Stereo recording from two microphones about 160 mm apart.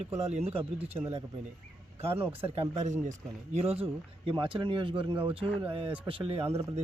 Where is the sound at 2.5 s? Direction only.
45° right (ahead or behind).